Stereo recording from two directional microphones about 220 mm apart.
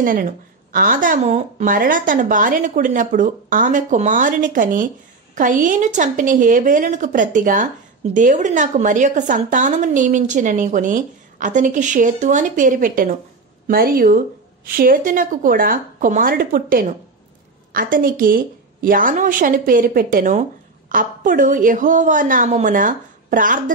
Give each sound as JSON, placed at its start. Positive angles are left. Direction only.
{"t": 0.0, "sound": "a woman's voice", "side_deg": -40}